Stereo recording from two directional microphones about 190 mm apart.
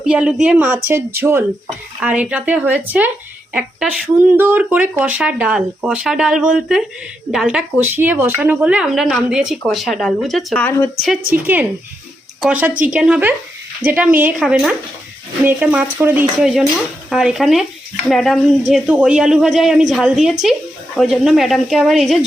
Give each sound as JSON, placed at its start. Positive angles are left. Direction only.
{"t": 0.0, "sound": "speech", "side_deg": -5}
{"t": 12.4, "sound": "speech", "side_deg": -5}